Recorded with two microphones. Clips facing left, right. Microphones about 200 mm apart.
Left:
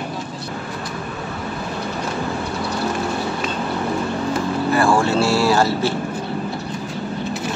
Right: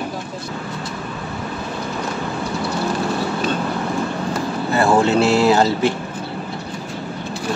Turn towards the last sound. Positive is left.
turn(degrees=-20)  # may be behind; listen again after turning